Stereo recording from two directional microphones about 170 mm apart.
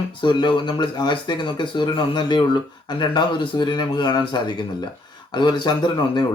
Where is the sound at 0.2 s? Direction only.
30° left (ahead or behind).